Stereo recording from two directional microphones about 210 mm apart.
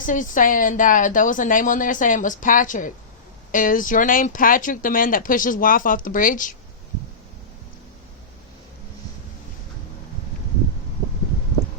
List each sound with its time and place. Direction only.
0.0 s speech: 40° left (ahead or behind)